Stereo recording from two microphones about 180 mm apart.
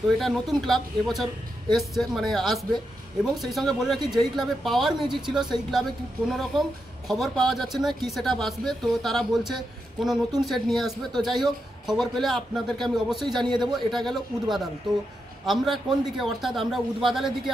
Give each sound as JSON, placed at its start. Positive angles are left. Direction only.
{"t": 0.2, "sound": "speech", "side_deg": 0}
{"t": 5.0, "sound": "a man's voice", "side_deg": -25}
{"t": 5.3, "sound": "speech", "side_deg": 0}
{"t": 13.5, "sound": "a man's voice", "side_deg": -25}
{"t": 13.9, "sound": "speech", "side_deg": 0}